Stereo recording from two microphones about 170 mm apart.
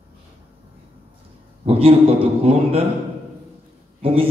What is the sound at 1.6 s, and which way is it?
Mantra, 35° right (ahead or behind).